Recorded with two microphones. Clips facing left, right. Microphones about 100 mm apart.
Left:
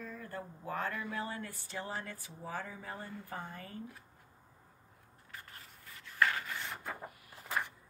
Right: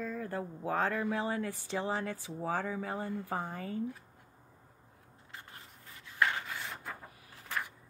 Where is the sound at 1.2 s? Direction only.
90° right.